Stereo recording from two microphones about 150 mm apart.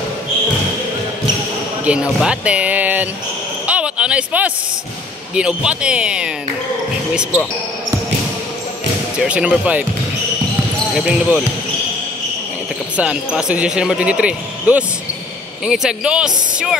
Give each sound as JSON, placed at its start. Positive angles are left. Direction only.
{"t": 1.9, "sound": "speech", "side_deg": -5}
{"t": 3.6, "sound": "a sound", "side_deg": -10}
{"t": 5.3, "sound": "speech", "side_deg": -5}
{"t": 9.2, "sound": "speech", "side_deg": -5}
{"t": 11.0, "sound": "speech", "side_deg": -5}
{"t": 12.9, "sound": "speech", "side_deg": -5}